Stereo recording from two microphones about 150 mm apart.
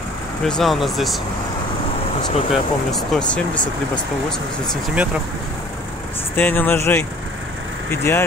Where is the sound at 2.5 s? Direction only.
Centre (ahead or behind).